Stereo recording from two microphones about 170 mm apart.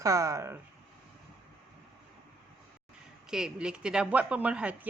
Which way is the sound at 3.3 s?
5° right (ahead or behind).